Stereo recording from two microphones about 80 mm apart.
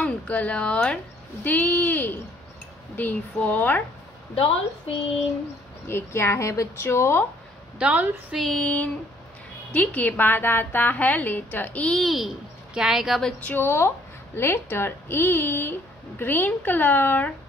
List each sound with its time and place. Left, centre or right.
0.0 s a woman's voice: centre
5.9 s a woman's voice: left
7.8 s a woman's voice: centre
8.3 s female singing: centre
9.7 s a woman's voice: left
12.0 s a child's voice: centre
13.4 s a woman's voice: centre
13.7 s a woman's voice: left